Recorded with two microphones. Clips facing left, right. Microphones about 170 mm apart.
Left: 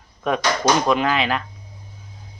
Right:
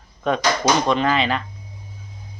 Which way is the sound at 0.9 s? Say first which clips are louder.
Even; 5° left (ahead or behind).